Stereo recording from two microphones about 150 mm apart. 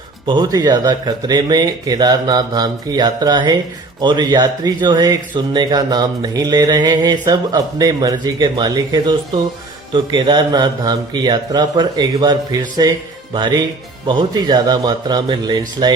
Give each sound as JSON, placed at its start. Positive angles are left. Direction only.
{"t": 0.3, "sound": "mantra", "side_deg": -25}